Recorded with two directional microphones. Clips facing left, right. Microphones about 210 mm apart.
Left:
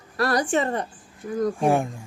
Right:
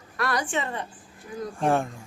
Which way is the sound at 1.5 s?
10° left (ahead or behind).